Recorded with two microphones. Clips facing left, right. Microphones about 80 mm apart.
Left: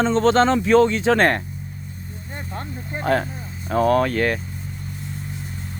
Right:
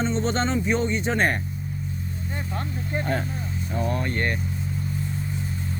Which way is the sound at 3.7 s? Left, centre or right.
Left.